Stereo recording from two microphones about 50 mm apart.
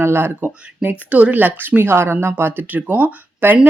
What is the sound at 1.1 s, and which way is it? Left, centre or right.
Speech, right.